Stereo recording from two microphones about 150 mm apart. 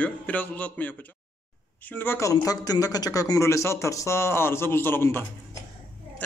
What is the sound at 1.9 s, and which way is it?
A man's voice, 15° left (ahead or behind).